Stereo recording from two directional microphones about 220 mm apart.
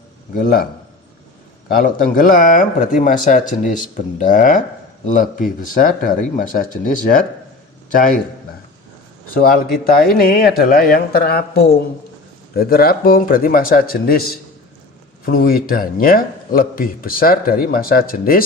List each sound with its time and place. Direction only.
0.3 s speech: 40° left (ahead or behind)
9.3 s speech: 40° left (ahead or behind)
15.3 s speech: 45° left (ahead or behind)